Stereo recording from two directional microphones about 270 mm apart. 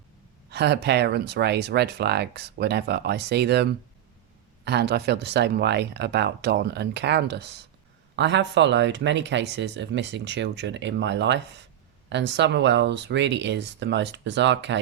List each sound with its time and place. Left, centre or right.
0.5 s speech: right